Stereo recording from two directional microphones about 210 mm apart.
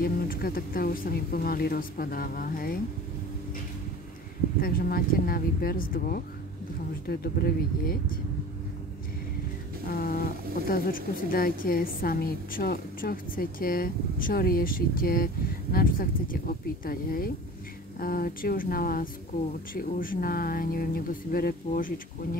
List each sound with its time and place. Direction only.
0.0 s speech: 45° left (ahead or behind)
4.6 s speech: 45° left (ahead or behind)
9.8 s speech: 45° left (ahead or behind)